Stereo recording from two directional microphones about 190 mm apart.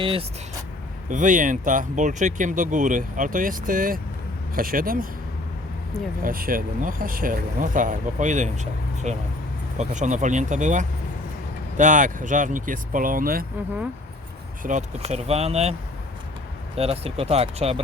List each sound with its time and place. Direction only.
0.0 s speech: 30° right (ahead or behind)
1.1 s speech: 40° right (ahead or behind)
6.2 s speech: 50° right (ahead or behind)
14.6 s speech: 40° right (ahead or behind)
16.7 s speech: 30° right (ahead or behind)